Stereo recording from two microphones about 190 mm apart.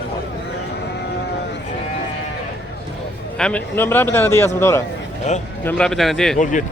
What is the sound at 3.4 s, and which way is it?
A man's voice, 5° left (ahead or behind).